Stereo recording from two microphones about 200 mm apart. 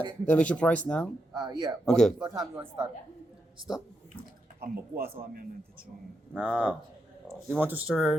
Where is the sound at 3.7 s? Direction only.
5° right (ahead or behind).